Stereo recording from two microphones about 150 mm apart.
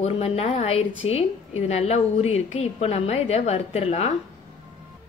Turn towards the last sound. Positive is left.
turn(degrees=45)  # may be behind; listen again after turning